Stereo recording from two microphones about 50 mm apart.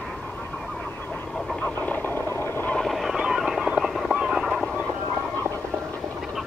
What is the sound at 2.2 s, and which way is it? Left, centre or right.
Vehicle, left.